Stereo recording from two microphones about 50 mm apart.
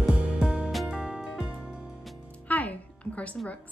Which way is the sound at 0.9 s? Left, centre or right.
Centre.